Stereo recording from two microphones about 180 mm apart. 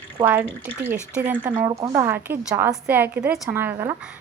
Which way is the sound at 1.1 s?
10° right (ahead or behind).